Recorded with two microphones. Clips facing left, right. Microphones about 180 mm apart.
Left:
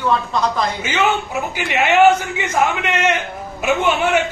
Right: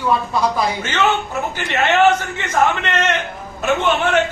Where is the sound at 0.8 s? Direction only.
10° left (ahead or behind).